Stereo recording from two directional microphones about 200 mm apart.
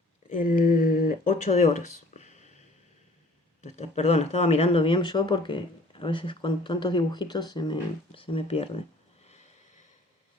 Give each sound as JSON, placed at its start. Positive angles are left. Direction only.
{"t": 0.3, "sound": "speech", "side_deg": 45}
{"t": 3.6, "sound": "speech", "side_deg": 35}